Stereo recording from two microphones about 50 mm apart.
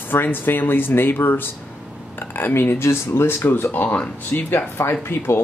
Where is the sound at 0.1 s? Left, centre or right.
Left.